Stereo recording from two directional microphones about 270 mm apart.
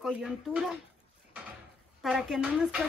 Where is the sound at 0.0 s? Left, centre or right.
Centre.